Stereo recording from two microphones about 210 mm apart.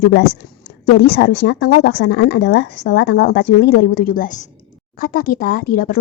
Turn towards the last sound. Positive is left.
turn(degrees=45)  # may be behind; listen again after turning